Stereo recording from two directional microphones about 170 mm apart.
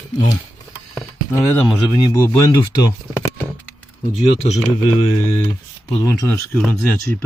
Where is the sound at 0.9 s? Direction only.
15° left (ahead or behind).